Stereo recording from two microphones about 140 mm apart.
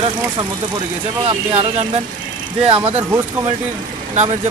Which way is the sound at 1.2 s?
40° right (ahead or behind).